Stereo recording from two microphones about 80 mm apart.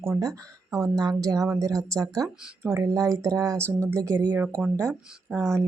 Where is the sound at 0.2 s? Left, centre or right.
Right.